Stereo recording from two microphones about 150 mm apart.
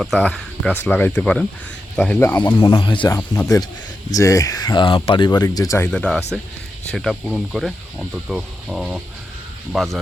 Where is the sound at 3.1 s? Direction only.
15° left (ahead or behind).